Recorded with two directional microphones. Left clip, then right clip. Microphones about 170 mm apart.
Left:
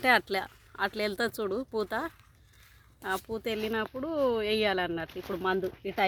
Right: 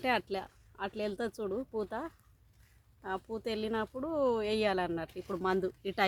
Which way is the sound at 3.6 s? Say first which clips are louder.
Left 3 dB; 20° left (ahead or behind).